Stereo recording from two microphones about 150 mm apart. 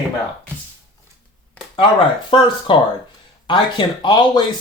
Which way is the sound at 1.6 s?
10° left (ahead or behind).